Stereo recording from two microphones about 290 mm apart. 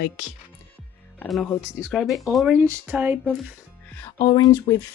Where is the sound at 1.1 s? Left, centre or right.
Centre.